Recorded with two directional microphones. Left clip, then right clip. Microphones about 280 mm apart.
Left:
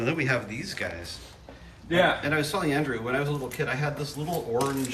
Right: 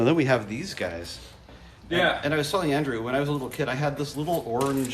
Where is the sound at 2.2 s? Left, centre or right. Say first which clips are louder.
Right 2 dB; centre.